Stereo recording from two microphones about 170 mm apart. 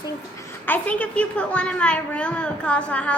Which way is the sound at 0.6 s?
10° left (ahead or behind).